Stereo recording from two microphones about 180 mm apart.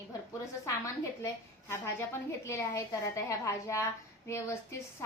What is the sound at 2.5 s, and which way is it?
A woman's voice, 15° left (ahead or behind).